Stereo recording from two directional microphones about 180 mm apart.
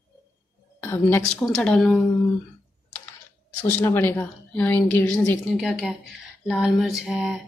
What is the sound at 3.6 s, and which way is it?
A woman's voice, 15° left (ahead or behind).